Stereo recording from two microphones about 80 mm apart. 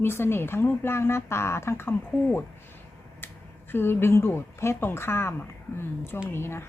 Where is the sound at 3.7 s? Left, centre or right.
Left.